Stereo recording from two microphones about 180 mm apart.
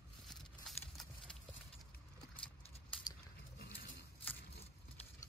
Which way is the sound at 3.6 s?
55° left (ahead or behind).